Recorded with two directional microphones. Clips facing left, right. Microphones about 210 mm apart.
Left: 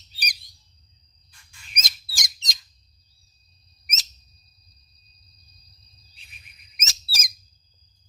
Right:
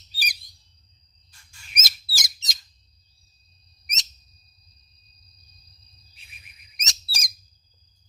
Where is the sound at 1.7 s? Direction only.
5° right (ahead or behind).